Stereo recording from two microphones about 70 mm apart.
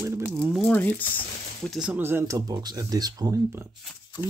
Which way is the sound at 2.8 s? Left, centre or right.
Right.